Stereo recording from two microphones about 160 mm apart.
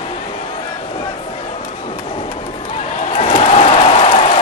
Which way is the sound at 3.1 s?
40° left (ahead or behind).